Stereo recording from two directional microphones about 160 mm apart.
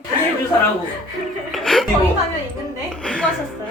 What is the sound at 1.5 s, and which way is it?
Speech, centre (ahead or behind).